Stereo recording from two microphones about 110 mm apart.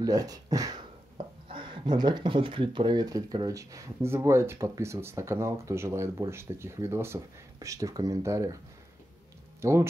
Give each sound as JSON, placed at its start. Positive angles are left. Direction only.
{"t": 0.0, "sound": "speech", "side_deg": -35}
{"t": 1.1, "sound": "speech", "side_deg": -50}
{"t": 9.6, "sound": "speech", "side_deg": -25}